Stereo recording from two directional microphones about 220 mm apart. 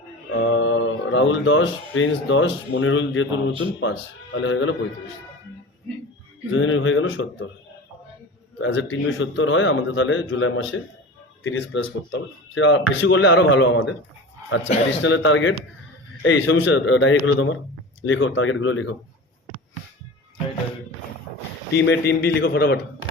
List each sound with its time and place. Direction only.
0.3 s speech: 60° left (ahead or behind)
6.5 s speech: 60° left (ahead or behind)
8.5 s speech: 60° left (ahead or behind)
21.8 s a man's voice: 50° left (ahead or behind)